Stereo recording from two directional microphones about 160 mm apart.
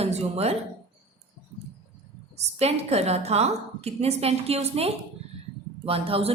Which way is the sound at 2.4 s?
40° right (ahead or behind).